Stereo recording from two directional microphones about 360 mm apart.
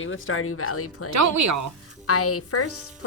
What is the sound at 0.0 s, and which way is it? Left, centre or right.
A woman's voice, left.